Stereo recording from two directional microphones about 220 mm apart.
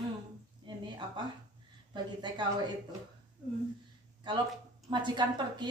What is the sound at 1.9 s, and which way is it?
Speech, 20° right (ahead or behind).